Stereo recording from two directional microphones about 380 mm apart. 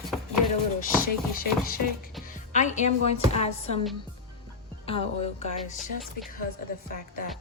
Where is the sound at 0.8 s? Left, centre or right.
Left.